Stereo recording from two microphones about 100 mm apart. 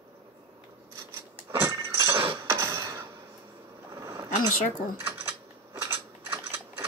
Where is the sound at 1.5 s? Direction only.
30° right (ahead or behind).